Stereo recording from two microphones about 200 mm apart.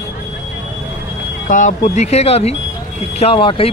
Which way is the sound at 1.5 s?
40° left (ahead or behind).